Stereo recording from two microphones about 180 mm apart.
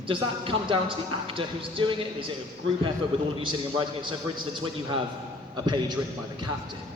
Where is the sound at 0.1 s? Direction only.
30° right (ahead or behind).